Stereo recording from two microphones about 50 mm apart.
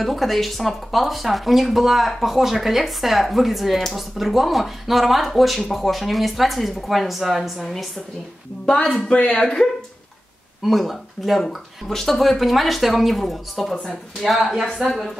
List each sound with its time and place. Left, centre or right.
0.0 s speech: centre
8.6 s a man's voice: left
10.6 s speech: centre